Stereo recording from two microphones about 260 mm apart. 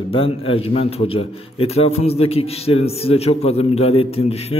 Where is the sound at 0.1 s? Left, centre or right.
Left.